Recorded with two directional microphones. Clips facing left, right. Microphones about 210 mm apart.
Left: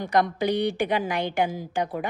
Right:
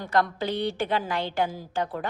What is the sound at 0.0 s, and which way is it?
Speech, 15° left (ahead or behind).